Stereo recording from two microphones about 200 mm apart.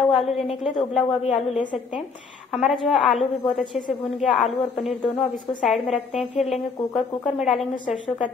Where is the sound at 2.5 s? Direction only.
Centre (ahead or behind).